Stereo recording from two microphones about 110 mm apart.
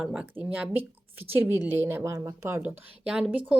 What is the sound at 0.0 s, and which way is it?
A woman's voice, 5° right (ahead or behind).